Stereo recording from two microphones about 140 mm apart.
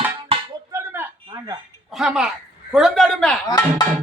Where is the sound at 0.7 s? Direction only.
20° right (ahead or behind).